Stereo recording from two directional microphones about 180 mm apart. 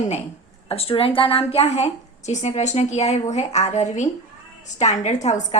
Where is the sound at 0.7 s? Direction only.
30° left (ahead or behind).